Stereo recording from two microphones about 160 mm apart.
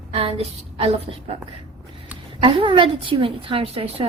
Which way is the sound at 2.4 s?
30° right (ahead or behind).